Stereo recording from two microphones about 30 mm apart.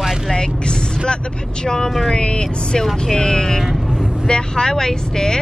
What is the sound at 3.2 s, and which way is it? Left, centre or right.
Speech, left.